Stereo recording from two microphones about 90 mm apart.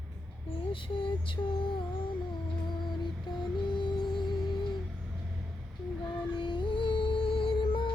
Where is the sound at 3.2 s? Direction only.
60° left (ahead or behind).